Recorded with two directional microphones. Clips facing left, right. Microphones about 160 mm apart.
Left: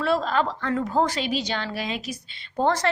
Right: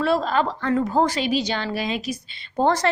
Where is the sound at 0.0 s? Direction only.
10° right (ahead or behind).